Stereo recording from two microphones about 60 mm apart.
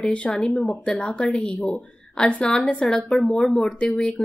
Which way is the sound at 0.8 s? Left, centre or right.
Centre.